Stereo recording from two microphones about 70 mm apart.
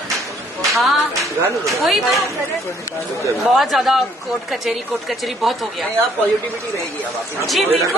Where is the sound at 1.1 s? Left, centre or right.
Right.